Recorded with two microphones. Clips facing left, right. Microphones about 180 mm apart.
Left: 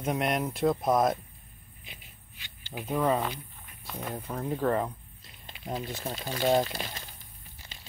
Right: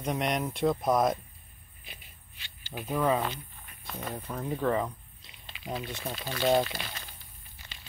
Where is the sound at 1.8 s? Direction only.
20° left (ahead or behind).